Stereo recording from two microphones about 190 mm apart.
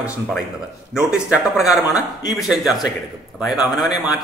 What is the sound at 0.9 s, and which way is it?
A man's voice, 5° right (ahead or behind).